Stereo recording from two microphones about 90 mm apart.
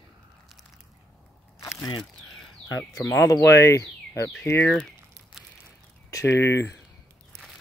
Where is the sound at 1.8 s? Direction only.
65° left (ahead or behind).